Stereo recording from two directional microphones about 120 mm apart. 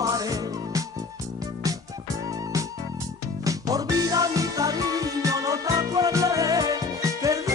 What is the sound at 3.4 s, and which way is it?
Music, 30° right (ahead or behind).